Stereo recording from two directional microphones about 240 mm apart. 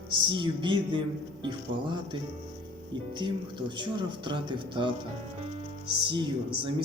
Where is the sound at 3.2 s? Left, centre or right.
Centre.